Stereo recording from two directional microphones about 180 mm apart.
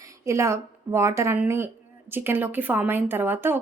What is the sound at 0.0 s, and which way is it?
A woman's voice, 15° right (ahead or behind).